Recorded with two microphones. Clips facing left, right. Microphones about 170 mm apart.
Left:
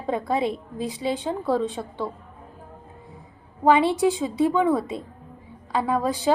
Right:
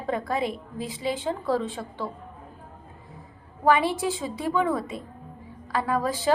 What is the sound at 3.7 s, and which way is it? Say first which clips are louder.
A woman's voice: left 4 dB; 20° left (ahead or behind).